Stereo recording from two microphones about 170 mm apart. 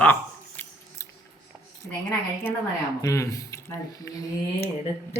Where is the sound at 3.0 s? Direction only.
20° left (ahead or behind).